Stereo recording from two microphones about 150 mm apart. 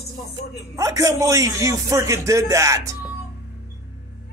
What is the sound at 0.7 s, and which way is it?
A man's voice, 20° right (ahead or behind).